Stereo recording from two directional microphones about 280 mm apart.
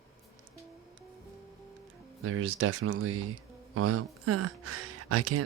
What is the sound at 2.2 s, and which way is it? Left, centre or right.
Speech, right.